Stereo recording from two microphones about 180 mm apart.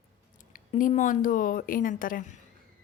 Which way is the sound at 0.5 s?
45° left (ahead or behind).